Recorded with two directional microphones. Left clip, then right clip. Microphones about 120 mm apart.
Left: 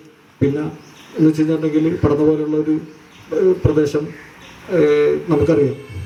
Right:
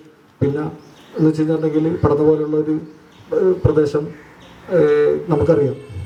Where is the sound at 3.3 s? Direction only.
25° right (ahead or behind).